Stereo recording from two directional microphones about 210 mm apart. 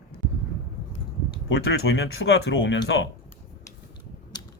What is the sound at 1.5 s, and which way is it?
Speech, 70° left (ahead or behind).